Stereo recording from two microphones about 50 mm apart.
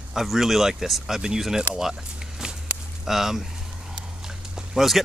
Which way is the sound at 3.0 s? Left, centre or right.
Centre.